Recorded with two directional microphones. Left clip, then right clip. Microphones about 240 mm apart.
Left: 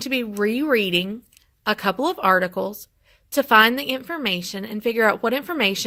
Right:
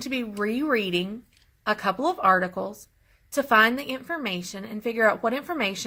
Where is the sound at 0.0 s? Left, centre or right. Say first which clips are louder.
Left 6 dB; left.